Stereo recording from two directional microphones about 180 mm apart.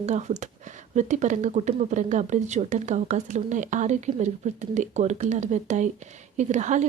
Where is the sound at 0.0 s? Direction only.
40° right (ahead or behind).